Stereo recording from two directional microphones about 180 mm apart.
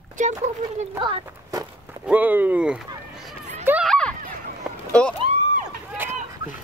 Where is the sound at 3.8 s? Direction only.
5° left (ahead or behind).